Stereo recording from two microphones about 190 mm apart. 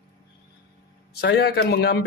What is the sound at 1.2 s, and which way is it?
Speech, 65° left (ahead or behind).